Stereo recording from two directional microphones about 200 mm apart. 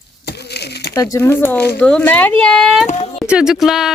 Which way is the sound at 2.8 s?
35° left (ahead or behind).